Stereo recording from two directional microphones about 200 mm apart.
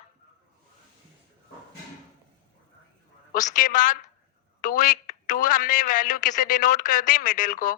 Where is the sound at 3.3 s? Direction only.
40° left (ahead or behind).